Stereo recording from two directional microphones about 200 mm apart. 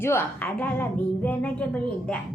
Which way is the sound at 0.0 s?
10° left (ahead or behind).